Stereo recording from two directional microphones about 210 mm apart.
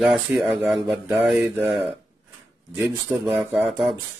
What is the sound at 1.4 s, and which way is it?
Speech, 10° right (ahead or behind).